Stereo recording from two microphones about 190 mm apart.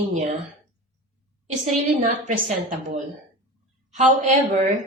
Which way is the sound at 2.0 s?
45° right (ahead or behind).